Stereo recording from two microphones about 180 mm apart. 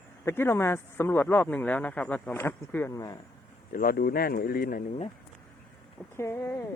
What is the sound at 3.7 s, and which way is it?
Speech, 55° left (ahead or behind).